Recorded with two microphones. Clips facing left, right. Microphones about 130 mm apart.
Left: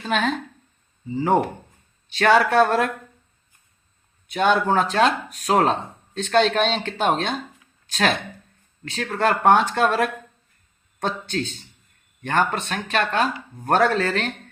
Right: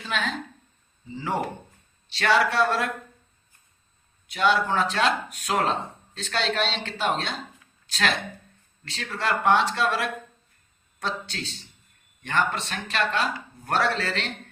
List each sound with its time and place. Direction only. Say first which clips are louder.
0.0 s speech: left 6 dB; 50° left (ahead or behind)
4.3 s speech: left 4 dB; 45° left (ahead or behind)